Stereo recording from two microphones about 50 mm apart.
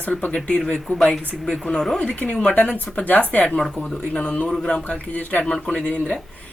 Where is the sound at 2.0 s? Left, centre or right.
Left.